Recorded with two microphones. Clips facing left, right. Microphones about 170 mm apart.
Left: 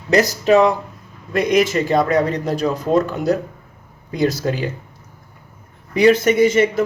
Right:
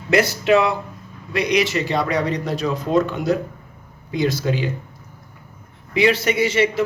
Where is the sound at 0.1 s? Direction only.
40° left (ahead or behind).